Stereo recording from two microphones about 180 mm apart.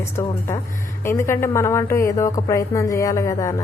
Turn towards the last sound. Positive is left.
turn(degrees=15)  # may be behind; listen again after turning